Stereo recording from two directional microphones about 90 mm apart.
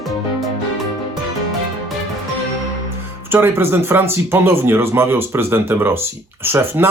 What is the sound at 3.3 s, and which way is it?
A man's voice, 25° right (ahead or behind).